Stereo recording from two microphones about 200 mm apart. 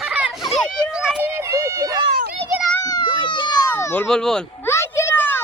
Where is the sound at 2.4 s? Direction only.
5° left (ahead or behind).